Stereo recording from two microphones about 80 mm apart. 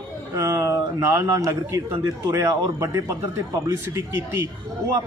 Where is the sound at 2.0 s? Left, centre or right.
Right.